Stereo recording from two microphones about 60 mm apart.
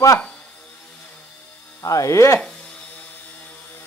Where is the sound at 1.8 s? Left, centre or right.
Left.